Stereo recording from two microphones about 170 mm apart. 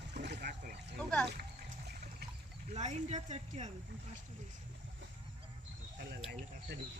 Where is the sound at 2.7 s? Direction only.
40° right (ahead or behind).